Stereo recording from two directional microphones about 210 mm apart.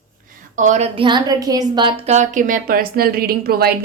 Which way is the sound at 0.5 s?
35° right (ahead or behind).